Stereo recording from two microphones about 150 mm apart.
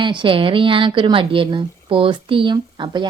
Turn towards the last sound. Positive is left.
turn(degrees=-30)  # may be behind; listen again after turning